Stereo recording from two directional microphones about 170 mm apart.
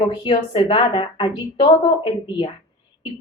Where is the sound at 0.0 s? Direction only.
30° left (ahead or behind).